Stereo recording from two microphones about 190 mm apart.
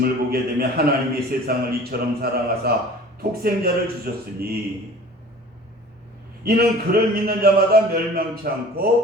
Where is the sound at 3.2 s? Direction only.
50° right (ahead or behind).